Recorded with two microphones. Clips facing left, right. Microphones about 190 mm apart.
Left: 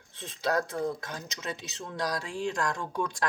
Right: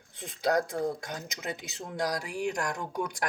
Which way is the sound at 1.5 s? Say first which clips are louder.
Even; 25° left (ahead or behind).